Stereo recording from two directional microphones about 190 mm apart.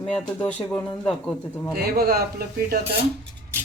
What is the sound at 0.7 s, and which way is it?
Speech, 5° left (ahead or behind).